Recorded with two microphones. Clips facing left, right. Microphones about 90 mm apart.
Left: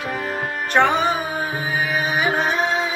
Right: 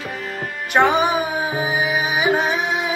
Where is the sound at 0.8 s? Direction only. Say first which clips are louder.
Right 1 dB; 15° right (ahead or behind).